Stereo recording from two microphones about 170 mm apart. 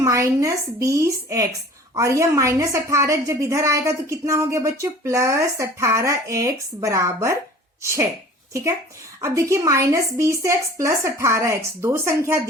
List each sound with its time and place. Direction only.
0.0 s a woman's voice: 20° right (ahead or behind)
9.2 s a woman's voice: 15° right (ahead or behind)